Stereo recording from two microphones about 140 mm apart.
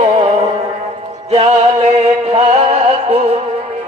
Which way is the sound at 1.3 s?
45° right (ahead or behind).